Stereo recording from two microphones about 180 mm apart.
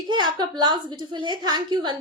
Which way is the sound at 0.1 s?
25° right (ahead or behind).